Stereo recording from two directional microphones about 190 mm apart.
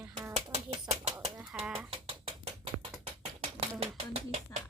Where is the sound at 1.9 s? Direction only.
30° right (ahead or behind).